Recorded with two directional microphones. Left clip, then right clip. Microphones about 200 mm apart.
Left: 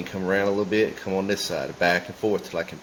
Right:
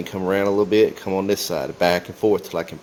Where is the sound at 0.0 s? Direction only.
35° right (ahead or behind).